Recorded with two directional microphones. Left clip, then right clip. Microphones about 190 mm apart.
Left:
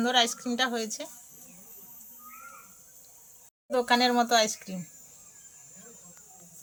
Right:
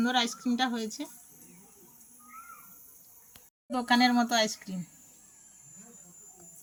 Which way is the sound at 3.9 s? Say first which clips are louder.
Left 1 dB; 30° left (ahead or behind).